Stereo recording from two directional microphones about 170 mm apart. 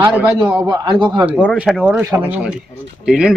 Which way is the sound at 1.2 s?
10° right (ahead or behind).